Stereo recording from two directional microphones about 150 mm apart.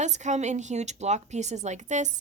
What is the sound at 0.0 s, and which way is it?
Speech, 50° right (ahead or behind).